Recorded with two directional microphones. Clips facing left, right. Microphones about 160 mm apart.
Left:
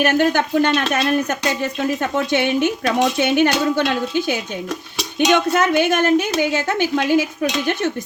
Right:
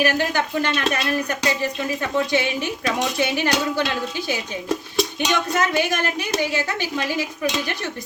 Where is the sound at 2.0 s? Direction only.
60° left (ahead or behind).